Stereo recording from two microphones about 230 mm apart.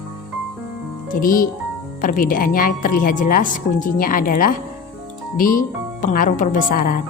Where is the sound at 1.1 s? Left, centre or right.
Left.